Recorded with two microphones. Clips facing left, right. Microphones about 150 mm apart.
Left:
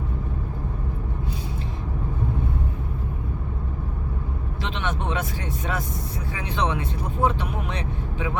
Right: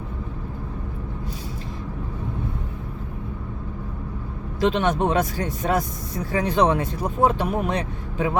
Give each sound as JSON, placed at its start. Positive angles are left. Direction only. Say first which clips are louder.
{"t": 4.6, "sound": "speech", "louder": "right 9 dB", "side_deg": -40}